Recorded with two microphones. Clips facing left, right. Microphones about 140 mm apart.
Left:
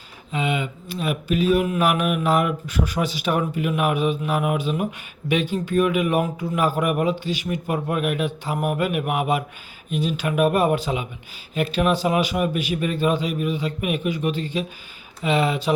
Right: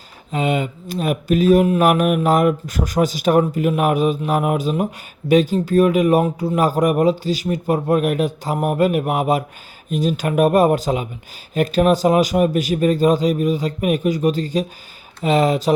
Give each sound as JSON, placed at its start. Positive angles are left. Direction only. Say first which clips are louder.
{"t": 0.3, "sound": "speech", "louder": "right 5 dB", "side_deg": -40}